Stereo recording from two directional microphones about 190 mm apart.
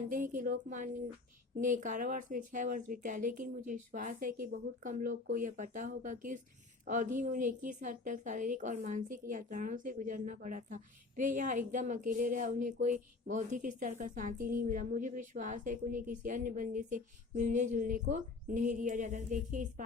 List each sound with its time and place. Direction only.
0.1 s a woman's voice: 45° right (ahead or behind)